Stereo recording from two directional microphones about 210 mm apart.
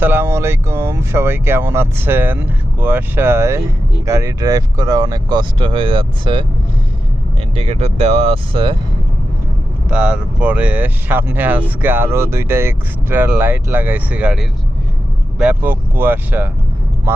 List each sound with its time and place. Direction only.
0.0 s speech: 10° right (ahead or behind)
7.5 s speech: 30° right (ahead or behind)
9.9 s speech: 5° right (ahead or behind)